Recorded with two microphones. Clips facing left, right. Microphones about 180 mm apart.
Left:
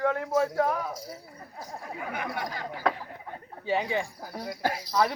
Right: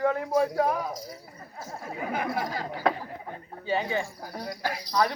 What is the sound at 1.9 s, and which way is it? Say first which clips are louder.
Speech: right 5 dB; 30° right (ahead or behind).